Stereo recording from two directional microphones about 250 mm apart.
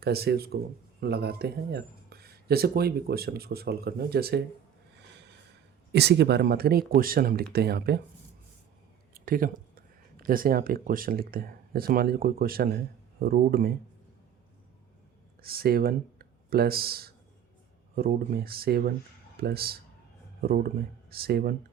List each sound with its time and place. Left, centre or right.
0.0 s speech: right
5.9 s speech: right
9.1 s speech: right
15.4 s speech: right